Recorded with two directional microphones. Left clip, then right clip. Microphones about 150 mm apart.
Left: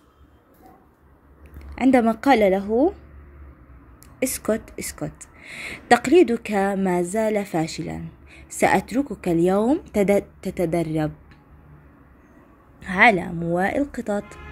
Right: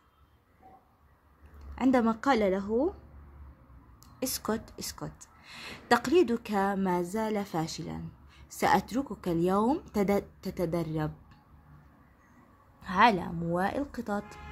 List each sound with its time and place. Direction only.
1.6 s a woman's voice: 15° left (ahead or behind)
4.2 s a woman's voice: 10° left (ahead or behind)
12.8 s a woman's voice: 15° left (ahead or behind)